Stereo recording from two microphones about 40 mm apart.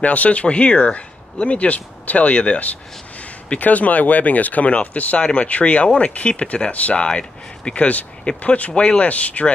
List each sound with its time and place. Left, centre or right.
0.0 s speech: left
7.0 s speech: left